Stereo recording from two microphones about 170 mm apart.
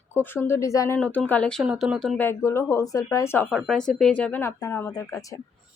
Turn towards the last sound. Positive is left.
turn(degrees=20)  # may be behind; listen again after turning